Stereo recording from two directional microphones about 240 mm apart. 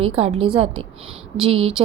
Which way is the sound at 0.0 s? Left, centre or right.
Right.